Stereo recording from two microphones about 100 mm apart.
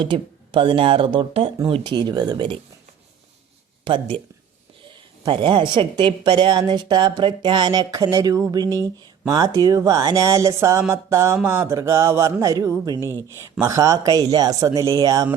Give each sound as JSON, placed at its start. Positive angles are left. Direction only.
{"t": 0.0, "sound": "speech", "side_deg": -55}
{"t": 3.8, "sound": "speech", "side_deg": -60}